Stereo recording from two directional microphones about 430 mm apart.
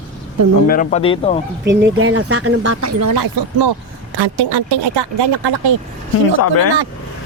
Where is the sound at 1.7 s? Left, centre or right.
Right.